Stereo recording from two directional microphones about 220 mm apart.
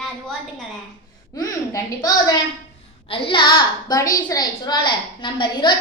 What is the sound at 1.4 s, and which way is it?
A woman's voice, 15° left (ahead or behind).